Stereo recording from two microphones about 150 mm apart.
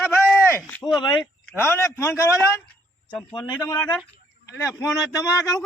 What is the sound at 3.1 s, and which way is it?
Speech, 10° left (ahead or behind).